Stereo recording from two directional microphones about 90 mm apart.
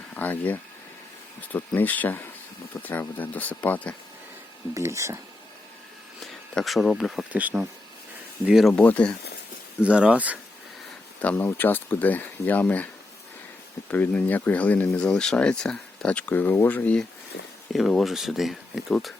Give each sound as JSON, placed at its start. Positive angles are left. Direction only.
{"t": 0.2, "sound": "speech", "side_deg": 20}
{"t": 4.7, "sound": "speech", "side_deg": -35}
{"t": 6.5, "sound": "speech", "side_deg": 0}
{"t": 7.3, "sound": "speech", "side_deg": -15}
{"t": 8.4, "sound": "speech", "side_deg": -5}
{"t": 8.7, "sound": "speech", "side_deg": 15}
{"t": 9.8, "sound": "speech", "side_deg": -15}
{"t": 11.3, "sound": "speech", "side_deg": 25}
{"t": 13.9, "sound": "speech", "side_deg": 15}
{"t": 17.7, "sound": "speech", "side_deg": 0}